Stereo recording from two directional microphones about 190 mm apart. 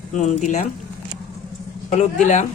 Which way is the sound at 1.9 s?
40° left (ahead or behind).